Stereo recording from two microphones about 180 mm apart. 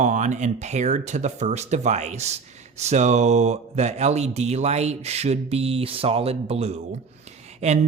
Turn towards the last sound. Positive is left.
turn(degrees=-35)  # may be behind; listen again after turning